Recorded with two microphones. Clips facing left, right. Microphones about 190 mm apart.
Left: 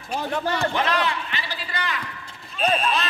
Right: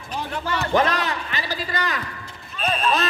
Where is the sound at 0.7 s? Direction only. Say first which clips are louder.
Right 3 dB; 40° right (ahead or behind).